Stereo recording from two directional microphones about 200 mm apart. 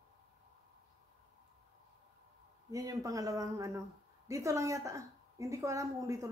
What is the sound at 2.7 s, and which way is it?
A woman's voice, 15° right (ahead or behind).